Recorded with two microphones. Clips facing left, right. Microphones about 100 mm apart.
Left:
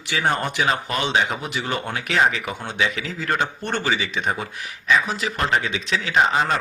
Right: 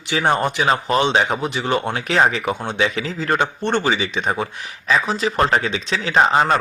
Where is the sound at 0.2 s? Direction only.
25° right (ahead or behind).